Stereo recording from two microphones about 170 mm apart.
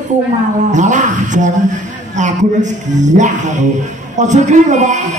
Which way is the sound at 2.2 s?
45° right (ahead or behind).